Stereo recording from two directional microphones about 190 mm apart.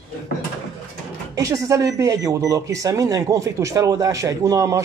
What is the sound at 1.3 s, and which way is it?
Speech, 15° right (ahead or behind).